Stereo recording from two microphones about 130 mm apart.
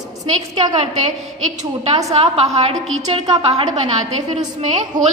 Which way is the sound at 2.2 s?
50° right (ahead or behind).